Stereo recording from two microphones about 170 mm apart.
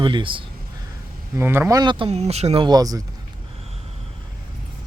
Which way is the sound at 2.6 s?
20° right (ahead or behind).